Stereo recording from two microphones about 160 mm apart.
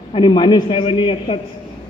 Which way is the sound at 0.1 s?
30° left (ahead or behind).